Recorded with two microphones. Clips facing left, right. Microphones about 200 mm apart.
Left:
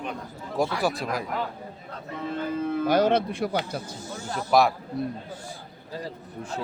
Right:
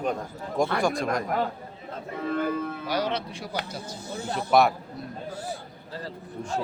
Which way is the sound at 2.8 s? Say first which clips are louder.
Left 11 dB; 50° left (ahead or behind).